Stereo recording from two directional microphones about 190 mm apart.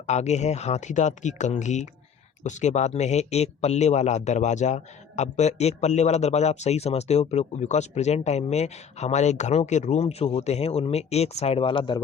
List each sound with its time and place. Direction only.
0.0 s speech: 35° left (ahead or behind)